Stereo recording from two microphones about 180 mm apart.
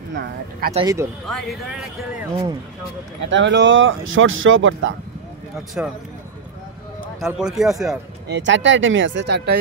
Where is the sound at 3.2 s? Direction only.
85° right.